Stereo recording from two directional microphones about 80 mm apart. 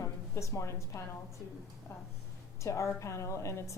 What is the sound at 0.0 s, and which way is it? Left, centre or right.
A woman's voice, left.